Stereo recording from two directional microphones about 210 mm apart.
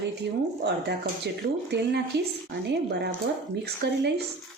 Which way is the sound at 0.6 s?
55° right (ahead or behind).